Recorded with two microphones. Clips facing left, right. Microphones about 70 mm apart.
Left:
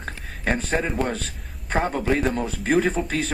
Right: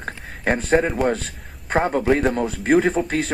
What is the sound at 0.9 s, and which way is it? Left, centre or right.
Speech, centre.